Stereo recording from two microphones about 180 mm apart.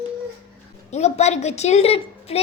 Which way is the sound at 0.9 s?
40° left (ahead or behind).